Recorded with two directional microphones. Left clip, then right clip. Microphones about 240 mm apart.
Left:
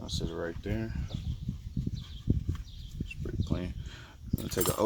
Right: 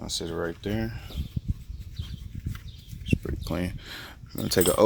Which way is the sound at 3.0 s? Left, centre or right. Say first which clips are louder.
Right 8 dB; right.